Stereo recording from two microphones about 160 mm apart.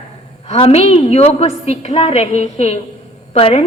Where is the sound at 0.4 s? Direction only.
35° left (ahead or behind).